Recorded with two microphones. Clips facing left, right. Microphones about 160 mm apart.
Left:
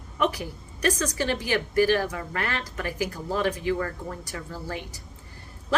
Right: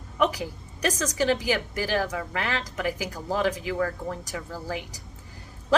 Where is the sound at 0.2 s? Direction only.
15° right (ahead or behind).